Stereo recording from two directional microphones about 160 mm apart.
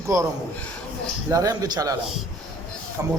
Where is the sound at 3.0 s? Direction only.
20° right (ahead or behind).